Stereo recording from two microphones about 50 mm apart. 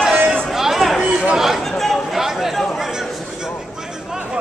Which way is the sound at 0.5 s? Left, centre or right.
Centre.